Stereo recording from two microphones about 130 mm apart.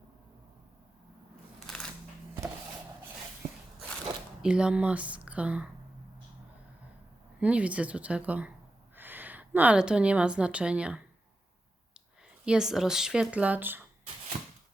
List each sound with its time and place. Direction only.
1.5 s a sound: 5° left (ahead or behind)
4.4 s a woman's voice: 5° right (ahead or behind)
7.3 s a woman's voice: 10° right (ahead or behind)
12.5 s speech: 5° right (ahead or behind)
14.3 s shuffling cards: 65° right (ahead or behind)